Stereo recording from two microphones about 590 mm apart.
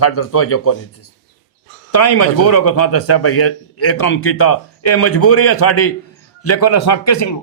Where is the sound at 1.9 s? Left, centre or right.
Left.